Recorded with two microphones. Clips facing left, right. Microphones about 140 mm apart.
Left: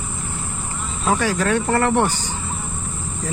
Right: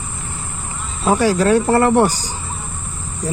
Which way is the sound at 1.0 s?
35° right (ahead or behind).